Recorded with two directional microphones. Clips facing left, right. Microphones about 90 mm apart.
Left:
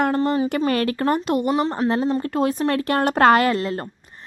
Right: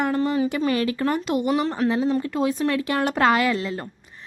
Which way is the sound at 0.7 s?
50° left (ahead or behind).